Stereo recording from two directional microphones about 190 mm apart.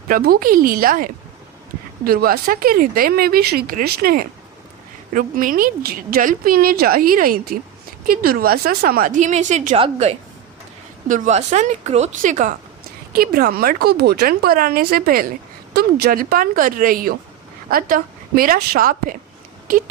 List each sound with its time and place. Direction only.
0.1 s a woman's voice: 50° right (ahead or behind)